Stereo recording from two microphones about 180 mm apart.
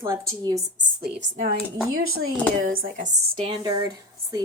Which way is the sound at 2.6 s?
50° right (ahead or behind).